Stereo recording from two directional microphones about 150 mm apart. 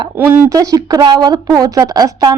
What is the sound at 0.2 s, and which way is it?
A woman's voice, 25° right (ahead or behind).